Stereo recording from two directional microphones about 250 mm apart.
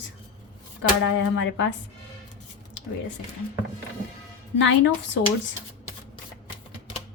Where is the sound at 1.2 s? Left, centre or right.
Left.